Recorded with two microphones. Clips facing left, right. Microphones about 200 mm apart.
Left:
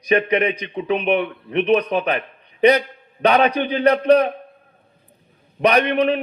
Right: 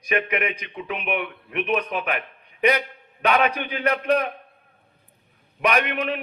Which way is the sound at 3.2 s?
35° left (ahead or behind).